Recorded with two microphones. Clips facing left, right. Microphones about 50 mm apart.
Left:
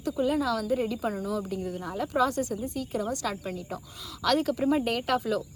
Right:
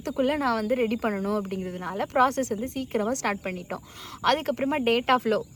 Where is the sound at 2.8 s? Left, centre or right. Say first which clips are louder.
Right 4 dB; right.